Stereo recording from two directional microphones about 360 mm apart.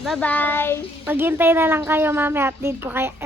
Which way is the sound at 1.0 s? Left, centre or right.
Centre.